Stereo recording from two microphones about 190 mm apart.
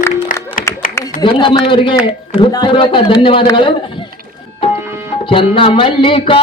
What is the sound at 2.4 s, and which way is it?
Speech, 25° left (ahead or behind).